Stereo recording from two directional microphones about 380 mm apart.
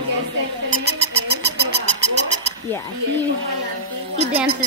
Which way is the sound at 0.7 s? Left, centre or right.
Right.